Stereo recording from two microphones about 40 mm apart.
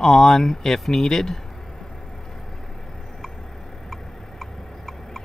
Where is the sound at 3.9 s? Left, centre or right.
Centre.